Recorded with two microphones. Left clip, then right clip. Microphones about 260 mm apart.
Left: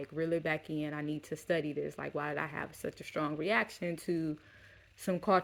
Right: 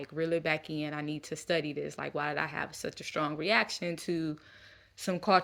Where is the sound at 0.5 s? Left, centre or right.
Right.